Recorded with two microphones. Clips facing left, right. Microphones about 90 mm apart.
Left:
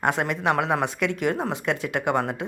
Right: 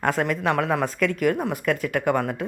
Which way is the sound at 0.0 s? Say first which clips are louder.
Right 1 dB; 20° left (ahead or behind).